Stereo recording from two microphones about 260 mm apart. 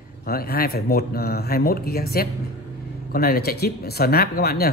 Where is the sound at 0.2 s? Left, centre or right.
Left.